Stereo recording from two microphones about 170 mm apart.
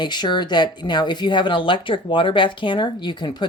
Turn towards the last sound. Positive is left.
turn(degrees=25)  # may be behind; listen again after turning